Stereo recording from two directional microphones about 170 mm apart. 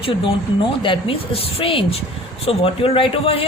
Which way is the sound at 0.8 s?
30° left (ahead or behind).